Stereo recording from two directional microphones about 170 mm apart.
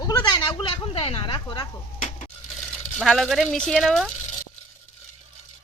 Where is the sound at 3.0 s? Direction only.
Centre (ahead or behind).